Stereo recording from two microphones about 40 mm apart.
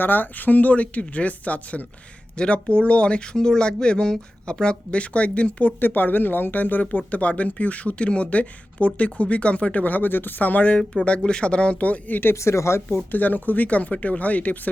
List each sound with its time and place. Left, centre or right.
0.0 s speech: left
2.3 s speech: left
5.8 s speech: left
10.8 s speech: left
12.2 s speech: left
13.1 s speech: left